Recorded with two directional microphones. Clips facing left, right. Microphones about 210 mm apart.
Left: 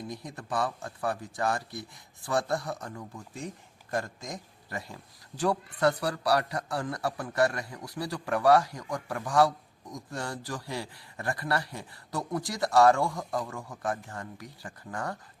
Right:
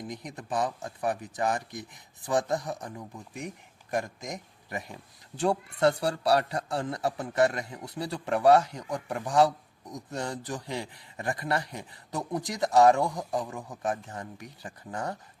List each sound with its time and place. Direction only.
0.0 s speech: 20° right (ahead or behind)